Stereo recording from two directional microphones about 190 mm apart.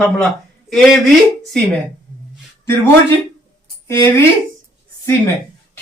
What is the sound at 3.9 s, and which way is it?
Speech, 15° left (ahead or behind).